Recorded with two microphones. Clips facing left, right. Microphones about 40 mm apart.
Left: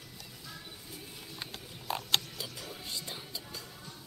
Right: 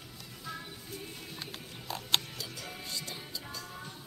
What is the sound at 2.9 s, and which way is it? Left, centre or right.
Music, centre.